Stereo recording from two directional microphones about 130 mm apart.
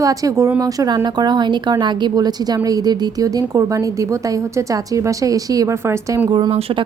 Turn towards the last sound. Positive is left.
turn(degrees=-45)  # may be behind; listen again after turning